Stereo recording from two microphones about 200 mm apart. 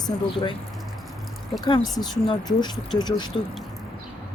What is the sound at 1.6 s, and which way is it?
Speech, 20° left (ahead or behind).